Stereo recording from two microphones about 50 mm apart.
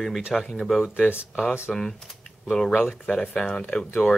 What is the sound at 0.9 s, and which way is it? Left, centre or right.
Speech, left.